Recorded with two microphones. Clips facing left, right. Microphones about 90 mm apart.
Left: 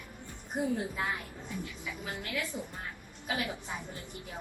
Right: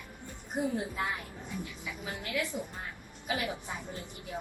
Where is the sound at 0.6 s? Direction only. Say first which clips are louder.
Even; 15° right (ahead or behind).